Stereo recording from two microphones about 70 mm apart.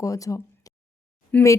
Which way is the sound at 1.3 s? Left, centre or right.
Left.